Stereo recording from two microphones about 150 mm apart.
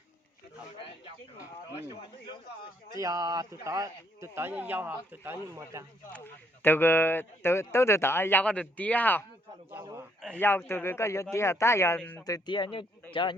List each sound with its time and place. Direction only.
2.9 s speech: 25° right (ahead or behind)
6.1 s speech: 15° left (ahead or behind)
9.6 s a man's voice: 15° right (ahead or behind)
10.2 s speech: 5° left (ahead or behind)
12.2 s speech: 25° left (ahead or behind)